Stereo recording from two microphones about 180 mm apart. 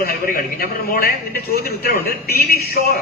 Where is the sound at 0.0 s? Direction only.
55° left (ahead or behind).